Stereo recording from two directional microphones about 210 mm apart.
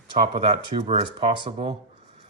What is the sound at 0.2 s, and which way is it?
Speech, 30° right (ahead or behind).